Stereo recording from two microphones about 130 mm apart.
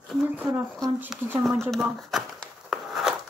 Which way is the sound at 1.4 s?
Centre (ahead or behind).